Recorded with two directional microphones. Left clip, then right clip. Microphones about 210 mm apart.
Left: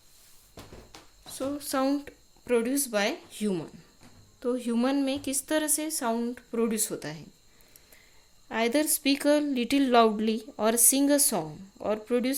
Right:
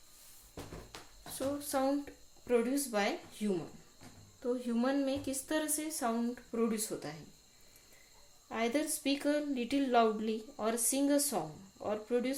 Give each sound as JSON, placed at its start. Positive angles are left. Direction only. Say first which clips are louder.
{"t": 0.9, "sound": "a sound", "louder": "left 1 dB", "side_deg": 5}
{"t": 1.3, "sound": "a woman's voice", "louder": "left 4 dB", "side_deg": 40}
{"t": 8.4, "sound": "a woman's voice", "louder": "left 8 dB", "side_deg": 50}